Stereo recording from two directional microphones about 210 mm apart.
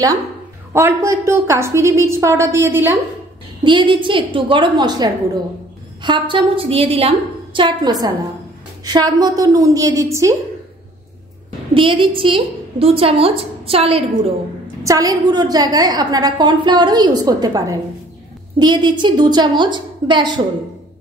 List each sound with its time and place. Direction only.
0.7 s a woman's voice: 15° right (ahead or behind)
3.6 s a woman's voice: 25° right (ahead or behind)
11.7 s a woman's voice: 25° right (ahead or behind)
14.9 s a woman's voice: 15° right (ahead or behind)